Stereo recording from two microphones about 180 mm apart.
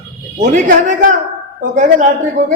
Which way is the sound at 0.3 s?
40° right (ahead or behind).